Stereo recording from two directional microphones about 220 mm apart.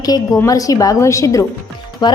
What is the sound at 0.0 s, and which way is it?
A woman's voice, 15° left (ahead or behind).